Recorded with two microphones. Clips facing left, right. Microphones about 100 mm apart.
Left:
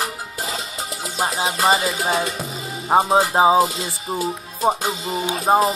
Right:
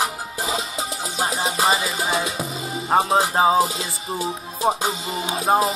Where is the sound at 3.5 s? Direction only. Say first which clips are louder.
Left 2 dB; centre (ahead or behind).